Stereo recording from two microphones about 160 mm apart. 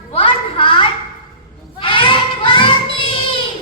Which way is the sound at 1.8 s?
30° left (ahead or behind).